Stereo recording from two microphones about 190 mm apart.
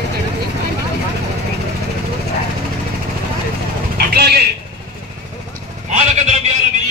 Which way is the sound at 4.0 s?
55° right (ahead or behind).